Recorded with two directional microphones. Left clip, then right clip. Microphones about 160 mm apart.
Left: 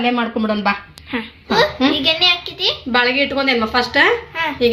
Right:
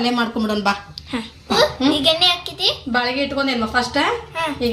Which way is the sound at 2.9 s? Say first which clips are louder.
Left 4 dB; 55° left (ahead or behind).